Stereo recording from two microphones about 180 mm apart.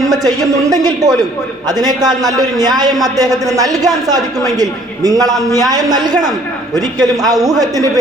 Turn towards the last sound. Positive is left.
turn(degrees=-20)  # may be behind; listen again after turning